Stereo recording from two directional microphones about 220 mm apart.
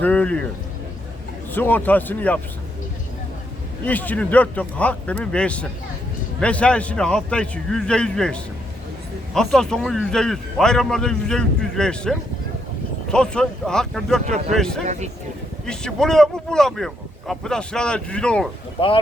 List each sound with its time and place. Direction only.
0.0 s a man's voice: 5° left (ahead or behind)
1.5 s speech: 10° left (ahead or behind)
3.8 s a man's voice: 5° left (ahead or behind)
14.3 s speech: 30° right (ahead or behind)
14.5 s a man's voice: 5° left (ahead or behind)
18.8 s speech: 25° left (ahead or behind)